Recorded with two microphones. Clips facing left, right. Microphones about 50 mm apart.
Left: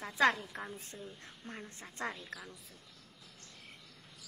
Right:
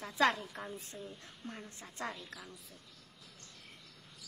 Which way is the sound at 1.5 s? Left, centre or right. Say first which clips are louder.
Left 1 dB; left.